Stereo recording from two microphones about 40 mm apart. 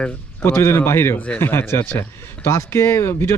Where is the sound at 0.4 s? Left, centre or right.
Left.